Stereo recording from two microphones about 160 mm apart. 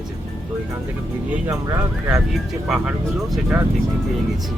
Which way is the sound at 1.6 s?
15° right (ahead or behind).